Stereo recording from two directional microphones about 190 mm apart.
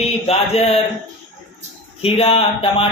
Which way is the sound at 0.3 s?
35° left (ahead or behind).